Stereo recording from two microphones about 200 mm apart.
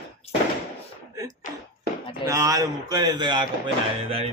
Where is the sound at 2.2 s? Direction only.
15° right (ahead or behind).